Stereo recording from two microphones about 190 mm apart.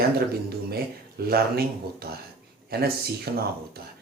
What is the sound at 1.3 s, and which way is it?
Speech, 55° right (ahead or behind).